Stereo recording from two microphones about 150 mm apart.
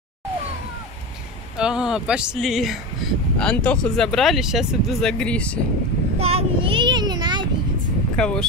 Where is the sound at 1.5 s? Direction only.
5° right (ahead or behind).